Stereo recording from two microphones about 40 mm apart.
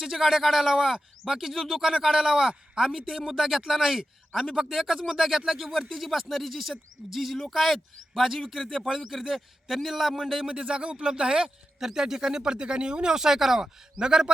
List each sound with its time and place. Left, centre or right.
0.0 s a man's voice: centre
2.8 s a man's voice: centre
10.5 s a man's voice: right